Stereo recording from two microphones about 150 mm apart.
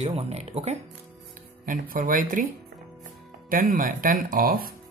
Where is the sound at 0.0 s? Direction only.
45° right (ahead or behind).